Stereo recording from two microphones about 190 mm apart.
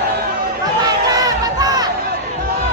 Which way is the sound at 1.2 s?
20° right (ahead or behind).